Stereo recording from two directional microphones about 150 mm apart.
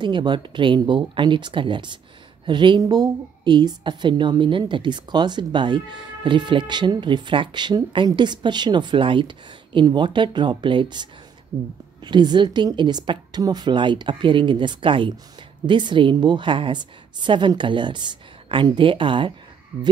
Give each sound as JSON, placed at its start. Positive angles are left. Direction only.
{"t": 0.0, "sound": "a woman's voice", "side_deg": -30}